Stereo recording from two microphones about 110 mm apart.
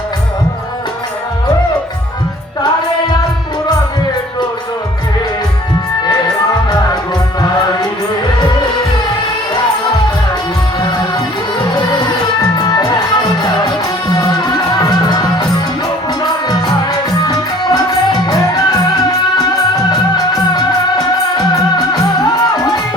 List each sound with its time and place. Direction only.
11.7 s music: 40° left (ahead or behind)
17.2 s music: 40° left (ahead or behind)